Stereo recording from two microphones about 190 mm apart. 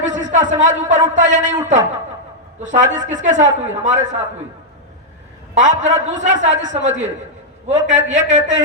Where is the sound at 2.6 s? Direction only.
40° right (ahead or behind).